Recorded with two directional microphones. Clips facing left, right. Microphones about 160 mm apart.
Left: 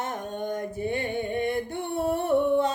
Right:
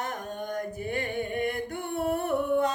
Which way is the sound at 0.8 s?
30° left (ahead or behind).